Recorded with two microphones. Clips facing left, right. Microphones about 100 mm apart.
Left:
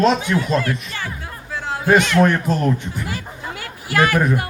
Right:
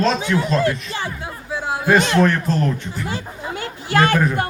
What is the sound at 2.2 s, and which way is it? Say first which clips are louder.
Speech: left 1 dB; 15° left (ahead or behind).